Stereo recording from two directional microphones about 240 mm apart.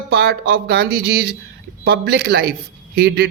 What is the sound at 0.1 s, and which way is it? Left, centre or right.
Speech, right.